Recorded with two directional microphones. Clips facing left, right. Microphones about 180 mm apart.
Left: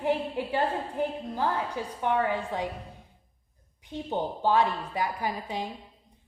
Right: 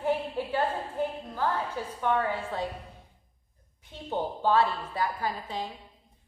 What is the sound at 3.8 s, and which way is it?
A woman's voice, 15° left (ahead or behind).